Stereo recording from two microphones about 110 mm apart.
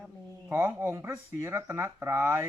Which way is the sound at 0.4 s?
20° right (ahead or behind).